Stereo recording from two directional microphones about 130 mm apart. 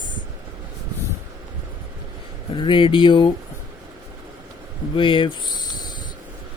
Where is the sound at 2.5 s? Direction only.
40° left (ahead or behind).